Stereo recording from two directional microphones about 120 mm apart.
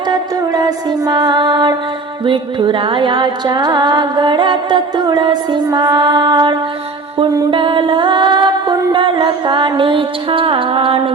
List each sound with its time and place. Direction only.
0.1 s music: 35° right (ahead or behind)